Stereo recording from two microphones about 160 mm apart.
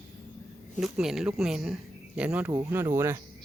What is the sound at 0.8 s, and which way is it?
Speech, 5° right (ahead or behind).